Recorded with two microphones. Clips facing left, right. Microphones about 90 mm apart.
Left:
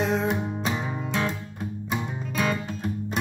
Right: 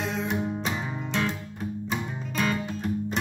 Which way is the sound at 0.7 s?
10° left (ahead or behind).